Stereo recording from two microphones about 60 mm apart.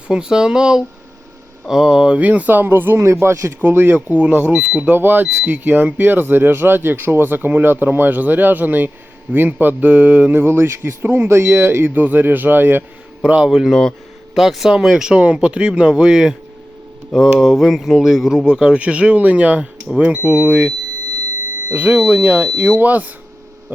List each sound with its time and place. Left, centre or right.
0.1 s speech: centre
2.1 s speech: right
4.1 s speech: right
10.3 s speech: right
13.2 s speech: centre
13.5 s mantra: centre
14.7 s speech: centre
17.1 s mantra: centre
18.0 s speech: centre; by 23.1 s right